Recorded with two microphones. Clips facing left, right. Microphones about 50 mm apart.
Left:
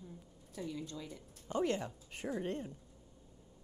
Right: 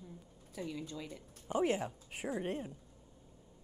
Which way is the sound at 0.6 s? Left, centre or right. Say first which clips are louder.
Right 1 dB; centre.